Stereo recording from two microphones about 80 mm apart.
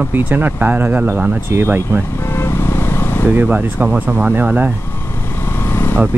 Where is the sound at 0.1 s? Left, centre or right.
Right.